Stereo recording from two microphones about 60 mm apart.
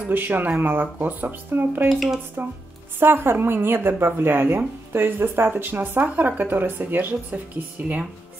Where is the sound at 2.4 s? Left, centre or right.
Right.